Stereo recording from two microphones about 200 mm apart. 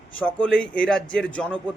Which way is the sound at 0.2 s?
5° left (ahead or behind).